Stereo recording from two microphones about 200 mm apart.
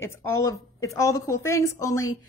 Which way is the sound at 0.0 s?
15° left (ahead or behind).